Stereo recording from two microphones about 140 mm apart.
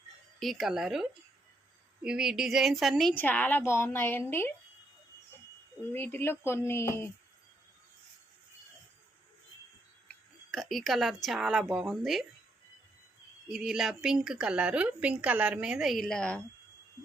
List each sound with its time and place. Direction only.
0.3 s a woman's voice: centre (ahead or behind)
2.0 s a woman's voice: 5° right (ahead or behind)
3.2 s a woman's voice: 10° left (ahead or behind)
5.9 s a woman's voice: 15° left (ahead or behind)
10.5 s a woman's voice: centre (ahead or behind)
13.5 s a woman's voice: 5° right (ahead or behind)